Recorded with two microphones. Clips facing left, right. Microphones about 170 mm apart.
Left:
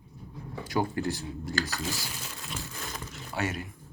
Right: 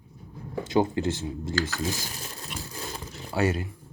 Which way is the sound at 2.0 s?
35° right (ahead or behind).